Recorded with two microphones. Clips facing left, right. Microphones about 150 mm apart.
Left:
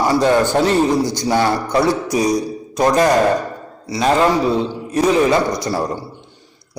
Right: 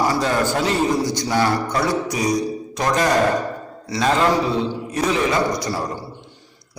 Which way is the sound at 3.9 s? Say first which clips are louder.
Left 3 dB; 10° left (ahead or behind).